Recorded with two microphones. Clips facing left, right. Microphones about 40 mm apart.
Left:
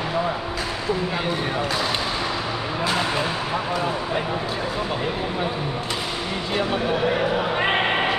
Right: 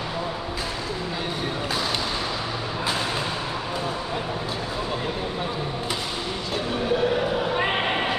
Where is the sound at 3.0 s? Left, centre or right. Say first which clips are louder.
Left 3 dB; left.